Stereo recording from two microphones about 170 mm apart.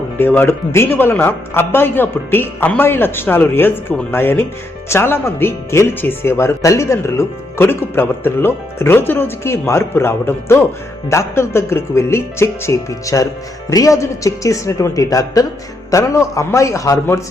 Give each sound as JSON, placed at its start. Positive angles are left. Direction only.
{"t": 0.2, "sound": "speech", "side_deg": 10}